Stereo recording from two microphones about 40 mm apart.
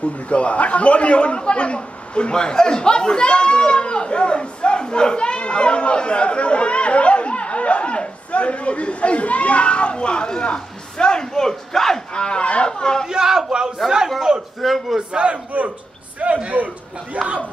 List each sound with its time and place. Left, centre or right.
0.3 s a man's voice: left; by 12.0 s centre
12.1 s speech: left
13.1 s a sound: centre
14.6 s a man's voice: centre
15.0 s a man's voice: right